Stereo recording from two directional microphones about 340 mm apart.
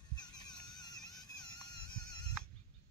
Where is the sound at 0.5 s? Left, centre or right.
Centre.